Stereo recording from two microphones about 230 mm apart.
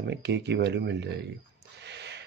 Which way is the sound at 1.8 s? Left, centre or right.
Right.